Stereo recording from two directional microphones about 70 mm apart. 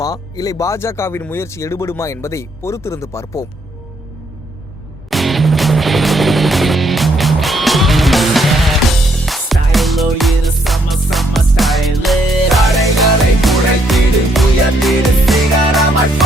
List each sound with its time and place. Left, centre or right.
0.0 s speech: left
5.1 s music: centre